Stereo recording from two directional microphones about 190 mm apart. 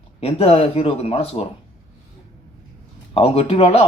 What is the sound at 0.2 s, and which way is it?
A man's voice, 30° left (ahead or behind).